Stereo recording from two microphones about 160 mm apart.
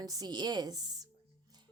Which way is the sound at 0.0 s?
25° right (ahead or behind).